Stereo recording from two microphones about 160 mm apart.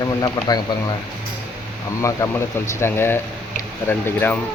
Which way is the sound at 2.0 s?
15° left (ahead or behind).